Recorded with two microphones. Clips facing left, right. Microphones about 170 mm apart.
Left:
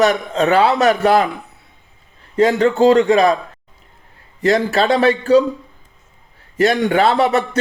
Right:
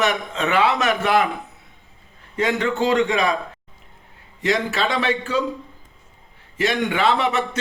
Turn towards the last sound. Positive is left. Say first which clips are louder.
# left 6 dB
turn(degrees=40)  # may be behind; listen again after turning